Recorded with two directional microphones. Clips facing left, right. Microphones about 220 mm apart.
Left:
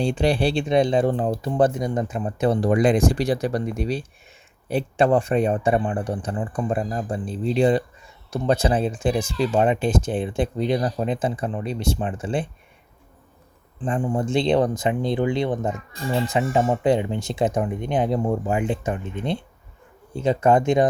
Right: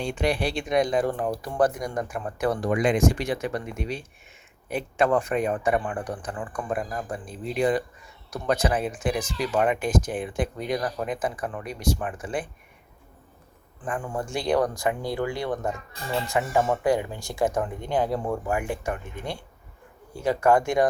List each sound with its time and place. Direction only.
0.0 s speech: 30° left (ahead or behind)
13.8 s speech: 25° left (ahead or behind)